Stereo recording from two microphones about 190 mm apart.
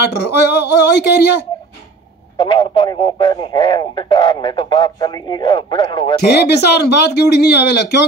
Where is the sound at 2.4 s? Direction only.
25° left (ahead or behind).